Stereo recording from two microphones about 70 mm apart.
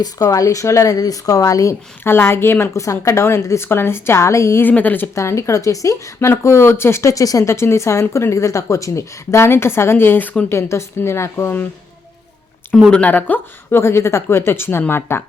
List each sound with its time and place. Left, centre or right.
0.0 s a woman's voice: left
2.0 s speech: left
2.7 s speech: left
4.6 s speech: left
5.1 s speech: left
6.1 s speech: left
10.5 s speech: left
12.9 s speech: left